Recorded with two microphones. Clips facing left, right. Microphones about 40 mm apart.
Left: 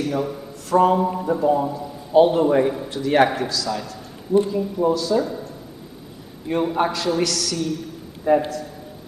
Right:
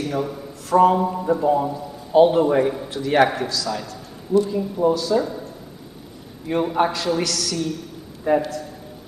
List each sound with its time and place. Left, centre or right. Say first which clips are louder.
0.0 s a man's voice: left 1 dB; centre
6.5 s a man's voice: right 1 dB; centre